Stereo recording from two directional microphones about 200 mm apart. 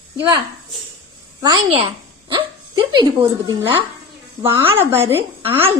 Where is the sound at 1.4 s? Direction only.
25° right (ahead or behind).